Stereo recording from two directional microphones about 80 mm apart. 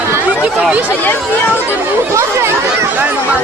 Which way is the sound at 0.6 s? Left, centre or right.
Centre.